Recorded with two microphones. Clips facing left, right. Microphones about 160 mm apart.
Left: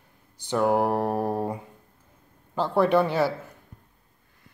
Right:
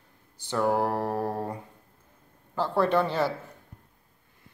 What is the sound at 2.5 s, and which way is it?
Speech, 15° left (ahead or behind).